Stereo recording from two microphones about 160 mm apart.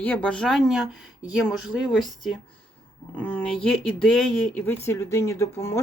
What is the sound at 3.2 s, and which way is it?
Speech, 10° left (ahead or behind).